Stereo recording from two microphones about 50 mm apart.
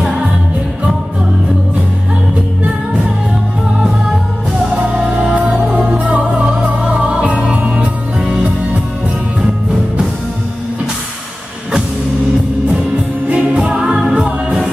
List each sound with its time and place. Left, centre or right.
4.9 s music: centre
5.4 s music: right
8.2 s music: centre
13.3 s music: centre